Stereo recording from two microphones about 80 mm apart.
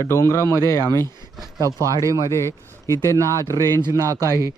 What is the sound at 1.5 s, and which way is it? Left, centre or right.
Speech, right.